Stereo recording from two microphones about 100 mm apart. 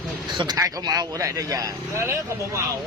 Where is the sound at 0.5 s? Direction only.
35° right (ahead or behind).